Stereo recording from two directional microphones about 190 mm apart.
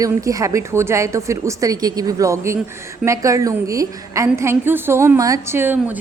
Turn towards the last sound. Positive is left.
turn(degrees=-10)  # may be behind; listen again after turning